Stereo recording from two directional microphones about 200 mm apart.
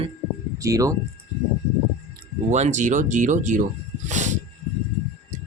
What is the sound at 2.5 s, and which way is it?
Speech, 35° right (ahead or behind).